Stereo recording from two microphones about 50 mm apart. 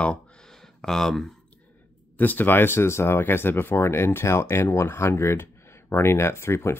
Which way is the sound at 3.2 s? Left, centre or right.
Left.